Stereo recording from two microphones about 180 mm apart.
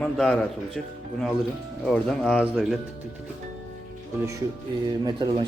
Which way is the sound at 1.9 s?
Centre (ahead or behind).